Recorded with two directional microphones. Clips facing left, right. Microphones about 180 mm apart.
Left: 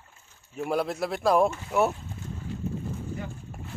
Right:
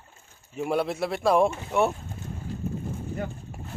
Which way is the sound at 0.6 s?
Centre (ahead or behind).